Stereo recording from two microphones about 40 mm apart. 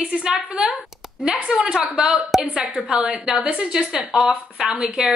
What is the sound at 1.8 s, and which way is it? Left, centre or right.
Speech, right.